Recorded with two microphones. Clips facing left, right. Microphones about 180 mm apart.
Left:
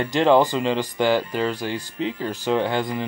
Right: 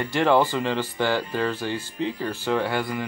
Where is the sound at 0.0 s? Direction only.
20° left (ahead or behind).